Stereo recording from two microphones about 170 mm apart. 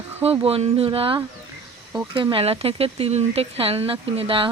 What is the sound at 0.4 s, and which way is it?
Speech, 35° right (ahead or behind).